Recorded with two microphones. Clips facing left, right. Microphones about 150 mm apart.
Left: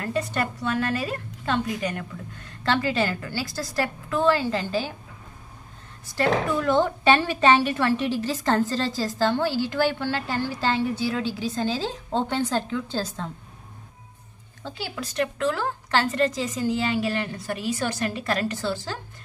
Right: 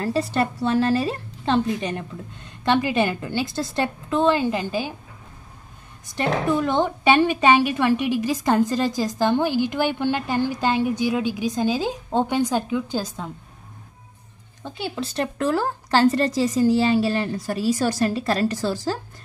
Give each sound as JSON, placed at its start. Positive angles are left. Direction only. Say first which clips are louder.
{"t": 0.0, "sound": "a woman's voice", "louder": "right 4 dB", "side_deg": -30}
{"t": 6.0, "sound": "a woman's voice", "louder": "right 1 dB", "side_deg": -20}
{"t": 14.6, "sound": "a woman's voice", "louder": "right 4 dB", "side_deg": -20}